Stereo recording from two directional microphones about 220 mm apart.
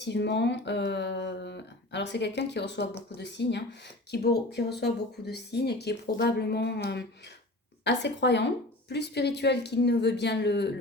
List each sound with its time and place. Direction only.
0.0 s speech: 50° left (ahead or behind)